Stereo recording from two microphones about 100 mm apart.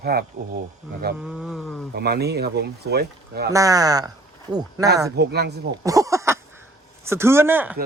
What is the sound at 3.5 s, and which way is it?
Speech, 35° right (ahead or behind).